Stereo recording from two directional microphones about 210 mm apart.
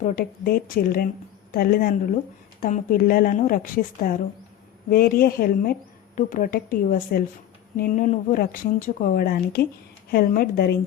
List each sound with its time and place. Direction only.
0.0 s speech: 45° left (ahead or behind)